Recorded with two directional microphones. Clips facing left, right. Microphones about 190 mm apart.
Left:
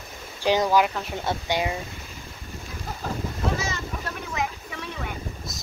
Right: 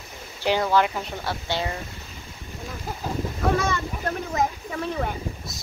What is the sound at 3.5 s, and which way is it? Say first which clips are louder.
Boat: right 6 dB; 55° right (ahead or behind).